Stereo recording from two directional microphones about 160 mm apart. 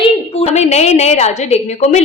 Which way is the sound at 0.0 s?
45° left (ahead or behind).